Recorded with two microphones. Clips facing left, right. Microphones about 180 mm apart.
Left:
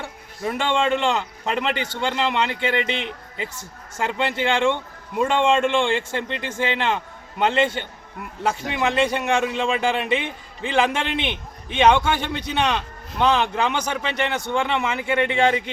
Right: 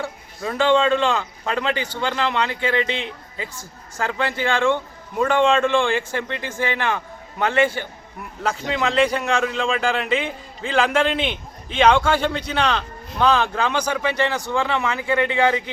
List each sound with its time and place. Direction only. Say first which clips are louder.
0.4 s speech: right 4 dB; 20° left (ahead or behind)